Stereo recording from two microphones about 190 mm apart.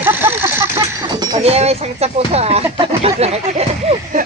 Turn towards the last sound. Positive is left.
turn(degrees=-35)  # may be behind; listen again after turning